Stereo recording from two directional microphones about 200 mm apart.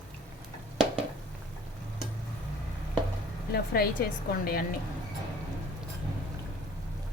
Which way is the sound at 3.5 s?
50° left (ahead or behind).